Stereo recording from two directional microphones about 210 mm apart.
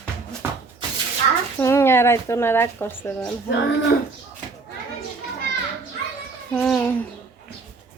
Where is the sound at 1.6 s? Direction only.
10° left (ahead or behind).